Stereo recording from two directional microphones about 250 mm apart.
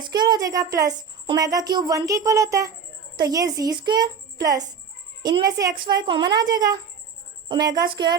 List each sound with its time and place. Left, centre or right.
0.0 s a woman's voice: centre